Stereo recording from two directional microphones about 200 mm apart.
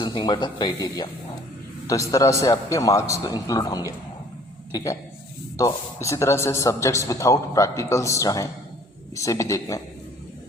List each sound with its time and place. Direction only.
0.0 s a man's voice: 20° left (ahead or behind)